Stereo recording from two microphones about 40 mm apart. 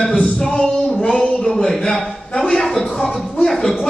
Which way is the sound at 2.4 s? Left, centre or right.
Centre.